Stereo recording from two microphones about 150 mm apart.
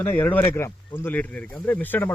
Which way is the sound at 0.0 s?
15° left (ahead or behind).